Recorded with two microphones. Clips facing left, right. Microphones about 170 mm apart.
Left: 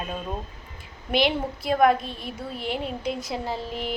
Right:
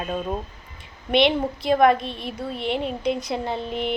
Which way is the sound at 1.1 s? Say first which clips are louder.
Right 4 dB; centre (ahead or behind).